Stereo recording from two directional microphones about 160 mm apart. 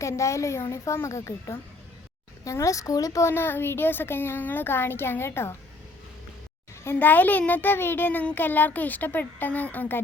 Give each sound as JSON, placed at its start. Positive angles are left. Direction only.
{"t": 0.0, "sound": "a woman's voice", "side_deg": 20}
{"t": 6.8, "sound": "a woman's voice", "side_deg": 10}